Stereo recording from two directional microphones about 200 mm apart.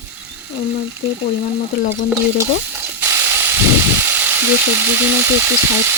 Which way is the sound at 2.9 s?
10° right (ahead or behind).